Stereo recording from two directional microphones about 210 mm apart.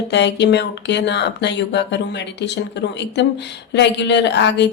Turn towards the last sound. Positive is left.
turn(degrees=55)  # may be behind; listen again after turning